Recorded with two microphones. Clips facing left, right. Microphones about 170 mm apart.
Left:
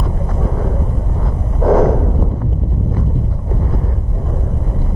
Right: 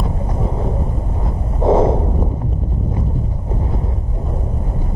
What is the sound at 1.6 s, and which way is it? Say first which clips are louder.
Heart sounds: left 1 dB; 25° right (ahead or behind).